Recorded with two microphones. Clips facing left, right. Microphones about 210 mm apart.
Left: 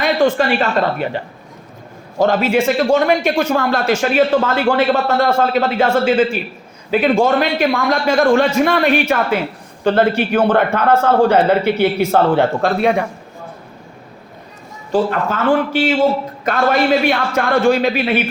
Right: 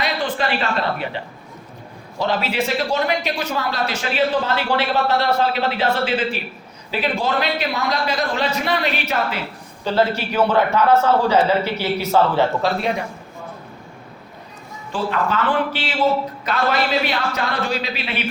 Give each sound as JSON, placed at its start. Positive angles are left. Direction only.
{"t": 0.0, "sound": "a man's voice", "side_deg": 45}
{"t": 14.9, "sound": "a man's voice", "side_deg": 45}